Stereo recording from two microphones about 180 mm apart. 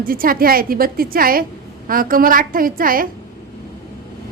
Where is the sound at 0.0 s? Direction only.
55° right (ahead or behind).